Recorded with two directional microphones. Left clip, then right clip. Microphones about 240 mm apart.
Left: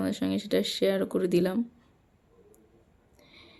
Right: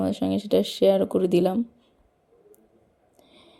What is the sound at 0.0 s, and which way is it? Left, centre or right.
Speech, centre.